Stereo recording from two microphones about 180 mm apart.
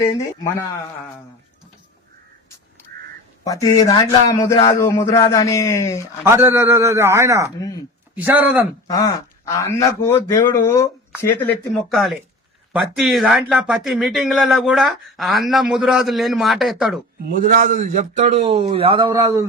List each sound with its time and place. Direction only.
0.0 s a man's voice: 15° left (ahead or behind)
3.4 s a man's voice: 20° left (ahead or behind)
6.0 s a man's voice: 15° right (ahead or behind)
8.9 s a man's voice: 20° left (ahead or behind); by 17.0 s centre (ahead or behind)
17.2 s a man's voice: 50° right (ahead or behind); by 19.5 s 20° right (ahead or behind)